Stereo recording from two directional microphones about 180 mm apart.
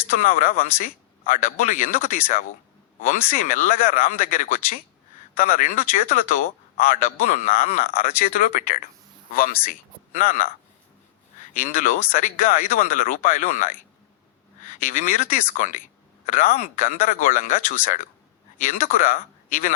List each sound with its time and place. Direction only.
0.1 s speech: 45° left (ahead or behind)
11.6 s speech: 45° left (ahead or behind)